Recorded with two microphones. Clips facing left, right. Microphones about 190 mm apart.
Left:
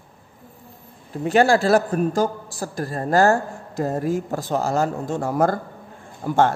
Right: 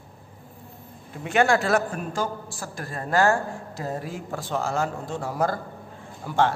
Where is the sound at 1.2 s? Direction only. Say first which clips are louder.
Left 5 dB; 35° left (ahead or behind).